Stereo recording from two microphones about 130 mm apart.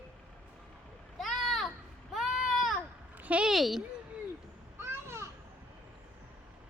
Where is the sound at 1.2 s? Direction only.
Centre (ahead or behind).